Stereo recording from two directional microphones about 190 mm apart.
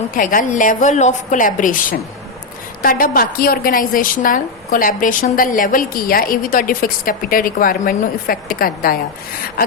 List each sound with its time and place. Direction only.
0.1 s a woman's voice: 45° left (ahead or behind)